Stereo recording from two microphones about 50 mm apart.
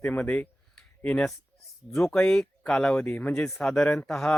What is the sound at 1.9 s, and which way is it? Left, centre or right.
Speech, centre.